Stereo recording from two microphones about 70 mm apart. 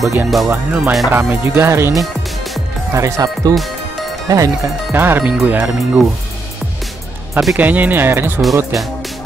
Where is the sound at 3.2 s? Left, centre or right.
Right.